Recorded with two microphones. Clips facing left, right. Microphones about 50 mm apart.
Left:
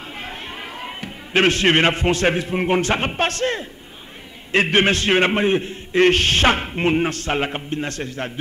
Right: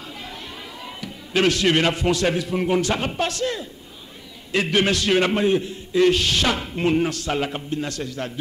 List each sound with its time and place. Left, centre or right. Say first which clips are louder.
0.2 s a man's voice: left 4 dB; left